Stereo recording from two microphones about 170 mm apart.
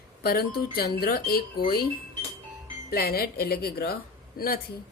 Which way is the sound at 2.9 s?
65° left (ahead or behind).